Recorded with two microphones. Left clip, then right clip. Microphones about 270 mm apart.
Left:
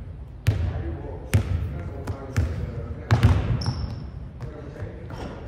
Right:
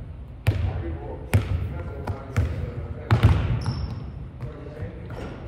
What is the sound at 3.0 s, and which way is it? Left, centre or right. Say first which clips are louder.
Basketball bounce: even; centre.